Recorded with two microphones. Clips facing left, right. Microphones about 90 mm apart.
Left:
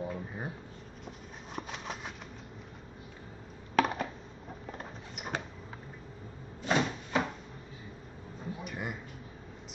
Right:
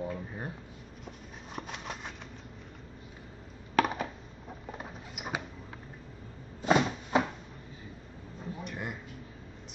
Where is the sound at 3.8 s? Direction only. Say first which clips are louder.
Right 1 dB; centre (ahead or behind).